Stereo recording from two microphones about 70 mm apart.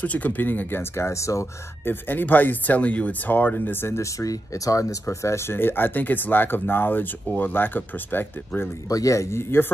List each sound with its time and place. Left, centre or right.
0.0 s speech: left
1.9 s speech: left
4.0 s speech: left
8.8 s a man's voice: left